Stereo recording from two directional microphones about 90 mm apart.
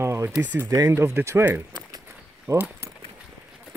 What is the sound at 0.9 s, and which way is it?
Speech, 30° right (ahead or behind).